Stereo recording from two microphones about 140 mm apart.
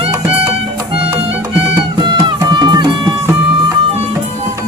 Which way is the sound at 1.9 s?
30° right (ahead or behind).